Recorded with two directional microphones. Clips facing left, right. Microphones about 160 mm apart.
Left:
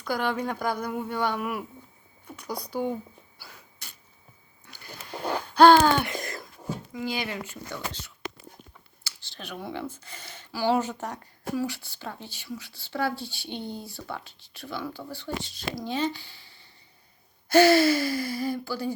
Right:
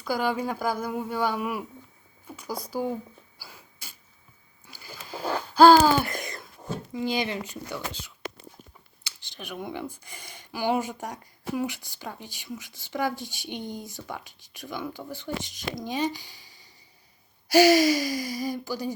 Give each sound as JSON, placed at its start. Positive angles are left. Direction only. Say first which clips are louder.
{"t": 0.0, "sound": "a woman's voice", "louder": "right 1 dB", "side_deg": -10}
{"t": 3.3, "sound": "sneeze", "louder": "even", "side_deg": -5}
{"t": 4.6, "sound": "a sound", "louder": "even", "side_deg": -5}
{"t": 6.9, "sound": "speech", "louder": "right 4 dB", "side_deg": -20}
{"t": 9.0, "sound": "speech", "louder": "right 1 dB", "side_deg": -15}